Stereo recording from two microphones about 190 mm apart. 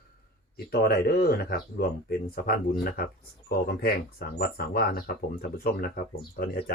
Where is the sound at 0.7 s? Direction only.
55° left (ahead or behind).